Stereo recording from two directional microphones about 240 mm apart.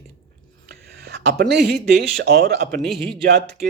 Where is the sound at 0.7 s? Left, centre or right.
Right.